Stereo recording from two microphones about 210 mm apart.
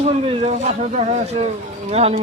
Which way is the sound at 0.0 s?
30° right (ahead or behind).